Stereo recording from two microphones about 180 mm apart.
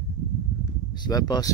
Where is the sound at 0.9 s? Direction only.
25° left (ahead or behind).